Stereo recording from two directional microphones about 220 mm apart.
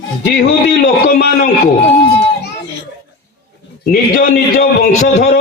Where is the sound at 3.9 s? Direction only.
40° left (ahead or behind).